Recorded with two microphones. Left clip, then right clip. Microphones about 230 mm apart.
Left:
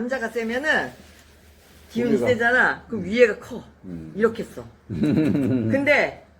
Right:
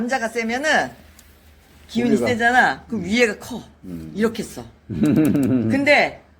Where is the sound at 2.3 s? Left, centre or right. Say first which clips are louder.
Right 2 dB; right.